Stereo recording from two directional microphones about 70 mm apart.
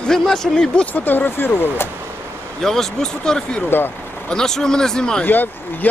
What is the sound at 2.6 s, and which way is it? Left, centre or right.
Speech, centre.